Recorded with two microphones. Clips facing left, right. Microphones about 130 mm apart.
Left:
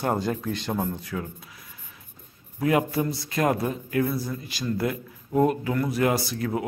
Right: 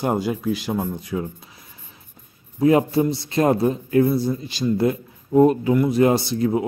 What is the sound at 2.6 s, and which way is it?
A man's voice, 25° right (ahead or behind).